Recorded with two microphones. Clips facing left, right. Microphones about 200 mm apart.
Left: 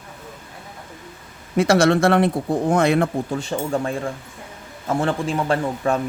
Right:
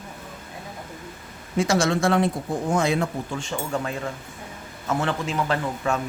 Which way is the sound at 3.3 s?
35° left (ahead or behind).